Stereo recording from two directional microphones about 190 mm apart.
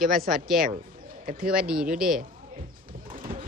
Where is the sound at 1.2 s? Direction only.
50° right (ahead or behind).